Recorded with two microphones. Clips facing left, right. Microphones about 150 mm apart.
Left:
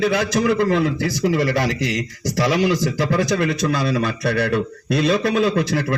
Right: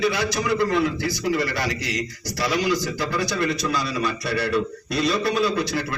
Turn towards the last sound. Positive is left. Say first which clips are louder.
# left 5 dB
turn(degrees=85)